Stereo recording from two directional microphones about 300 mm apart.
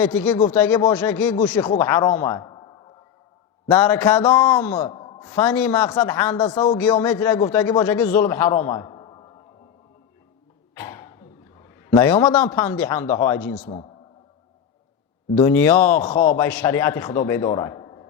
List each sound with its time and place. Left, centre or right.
0.3 s a man's voice: centre
3.7 s a man's voice: centre
10.8 s a sound: centre
11.9 s a man's voice: centre
13.4 s a man's voice: centre
15.4 s a man's voice: centre